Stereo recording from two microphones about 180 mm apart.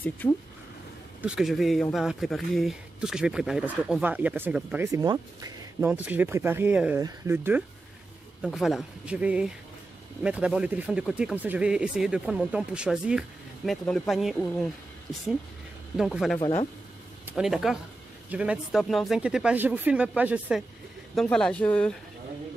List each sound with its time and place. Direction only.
1.2 s speech: 5° right (ahead or behind)
5.0 s speech: 20° right (ahead or behind)
5.8 s speech: 10° right (ahead or behind)
8.4 s speech: centre (ahead or behind)
16.0 s speech: centre (ahead or behind)
16.3 s speech: 25° left (ahead or behind)
17.3 s speech: 5° right (ahead or behind)
21.1 s speech: 5° left (ahead or behind)